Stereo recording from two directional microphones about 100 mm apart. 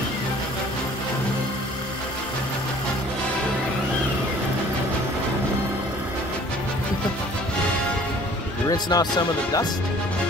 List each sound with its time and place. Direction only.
8.6 s speech: 40° left (ahead or behind)